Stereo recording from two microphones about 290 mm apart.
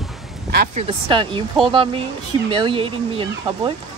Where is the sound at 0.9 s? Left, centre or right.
Centre.